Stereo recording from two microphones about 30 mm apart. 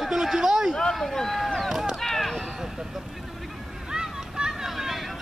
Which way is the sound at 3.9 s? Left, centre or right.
Right.